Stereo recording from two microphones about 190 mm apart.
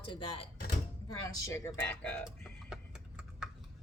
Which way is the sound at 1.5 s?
15° left (ahead or behind).